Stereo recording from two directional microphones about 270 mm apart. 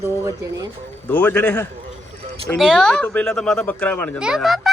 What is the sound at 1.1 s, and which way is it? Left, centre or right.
A man's voice, centre.